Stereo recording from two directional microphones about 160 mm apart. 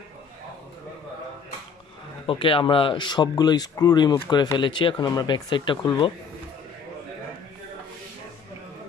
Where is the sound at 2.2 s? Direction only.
30° left (ahead or behind).